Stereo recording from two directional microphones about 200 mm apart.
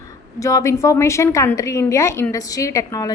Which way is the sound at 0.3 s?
15° left (ahead or behind).